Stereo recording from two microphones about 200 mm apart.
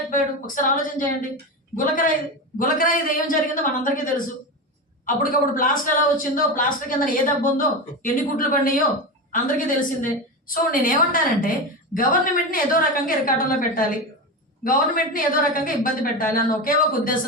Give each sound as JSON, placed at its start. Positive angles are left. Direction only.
{"t": 0.1, "sound": "a woman's voice", "side_deg": 40}